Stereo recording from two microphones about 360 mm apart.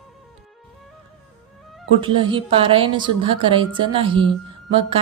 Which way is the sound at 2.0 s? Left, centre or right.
Centre.